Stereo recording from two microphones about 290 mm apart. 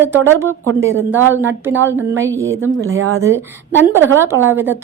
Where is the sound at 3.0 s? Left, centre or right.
Right.